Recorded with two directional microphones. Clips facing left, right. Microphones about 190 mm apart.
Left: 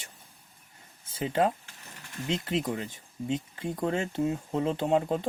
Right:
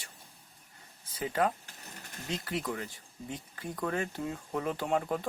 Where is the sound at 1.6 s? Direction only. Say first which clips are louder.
Right 1 dB; 40° right (ahead or behind).